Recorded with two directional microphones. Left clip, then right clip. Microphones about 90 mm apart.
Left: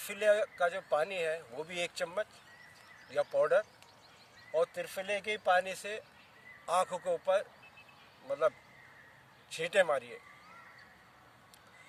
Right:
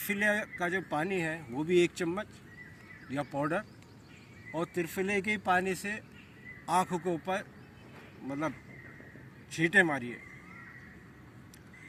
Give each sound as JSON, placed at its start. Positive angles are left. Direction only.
{"t": 0.1, "sound": "speech", "side_deg": 40}
{"t": 3.1, "sound": "speech", "side_deg": 40}